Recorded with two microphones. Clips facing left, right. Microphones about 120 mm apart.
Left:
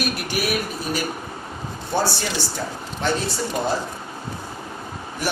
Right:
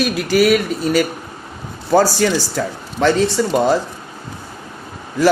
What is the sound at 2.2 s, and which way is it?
Speech, 90° right.